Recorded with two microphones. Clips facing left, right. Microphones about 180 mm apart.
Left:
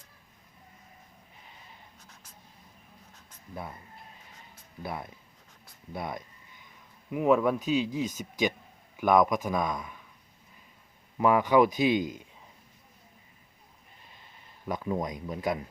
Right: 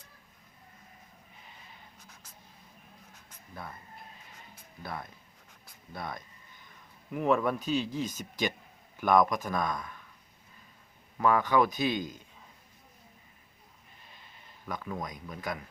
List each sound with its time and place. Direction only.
3.5 s speech: 20° left (ahead or behind)
4.8 s speech: 20° left (ahead or behind)
11.2 s speech: 15° left (ahead or behind)
14.7 s speech: 25° left (ahead or behind)